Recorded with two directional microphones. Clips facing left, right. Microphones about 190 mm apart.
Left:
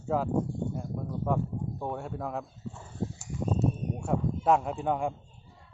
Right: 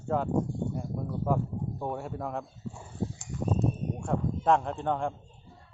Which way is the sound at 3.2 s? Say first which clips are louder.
Left 1 dB; 5° left (ahead or behind).